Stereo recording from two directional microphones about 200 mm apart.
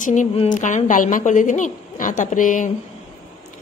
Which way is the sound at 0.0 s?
40° left (ahead or behind).